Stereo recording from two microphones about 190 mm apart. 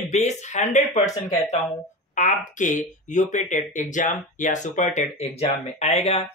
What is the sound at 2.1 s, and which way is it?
Speech, 40° left (ahead or behind).